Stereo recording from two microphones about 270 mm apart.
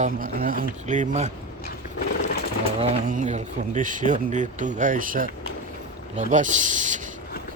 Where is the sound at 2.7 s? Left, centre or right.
Right.